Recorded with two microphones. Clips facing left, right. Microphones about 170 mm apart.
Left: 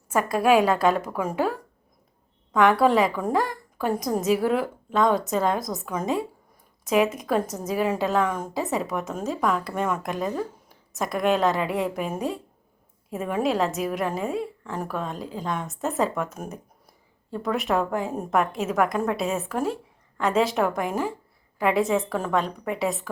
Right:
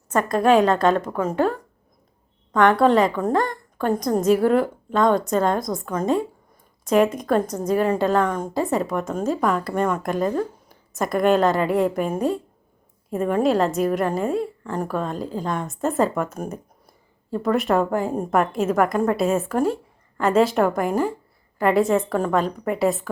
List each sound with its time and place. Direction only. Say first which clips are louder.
0.1 s a woman's voice: right 2 dB; 5° left (ahead or behind)